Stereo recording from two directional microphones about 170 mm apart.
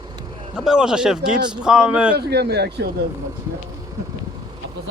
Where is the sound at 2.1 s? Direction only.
70° right (ahead or behind).